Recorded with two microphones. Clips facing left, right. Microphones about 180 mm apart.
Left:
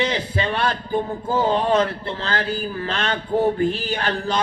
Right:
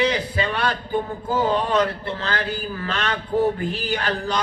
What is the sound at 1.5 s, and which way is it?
A man's voice, 30° left (ahead or behind).